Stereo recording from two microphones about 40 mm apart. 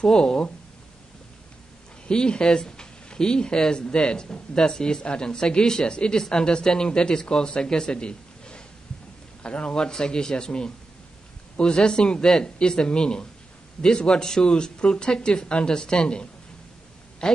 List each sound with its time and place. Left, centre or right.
0.0 s speech: centre
2.0 s speech: left